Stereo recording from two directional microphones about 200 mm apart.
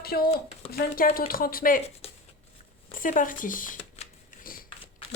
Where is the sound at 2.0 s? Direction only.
30° left (ahead or behind).